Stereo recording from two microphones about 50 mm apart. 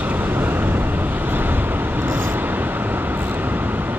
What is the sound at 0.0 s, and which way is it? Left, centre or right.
Vehicle, right.